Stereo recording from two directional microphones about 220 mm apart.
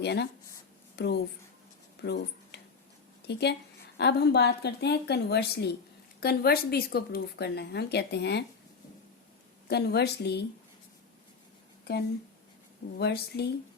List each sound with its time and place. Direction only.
0.0 s speech: 50° left (ahead or behind)
2.0 s a sound: 50° left (ahead or behind)
3.3 s speech: 50° left (ahead or behind)
9.6 s speech: 50° left (ahead or behind)
13.0 s speech: 50° left (ahead or behind)